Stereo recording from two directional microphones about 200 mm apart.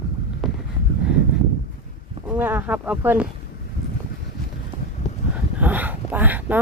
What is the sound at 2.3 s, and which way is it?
Speech, 10° right (ahead or behind).